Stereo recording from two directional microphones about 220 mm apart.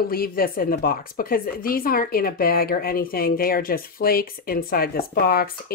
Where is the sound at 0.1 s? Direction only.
40° left (ahead or behind).